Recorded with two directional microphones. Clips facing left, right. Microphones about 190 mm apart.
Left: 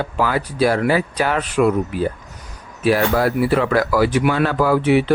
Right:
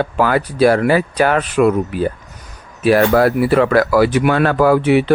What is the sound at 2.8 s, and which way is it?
Speech, 60° right (ahead or behind).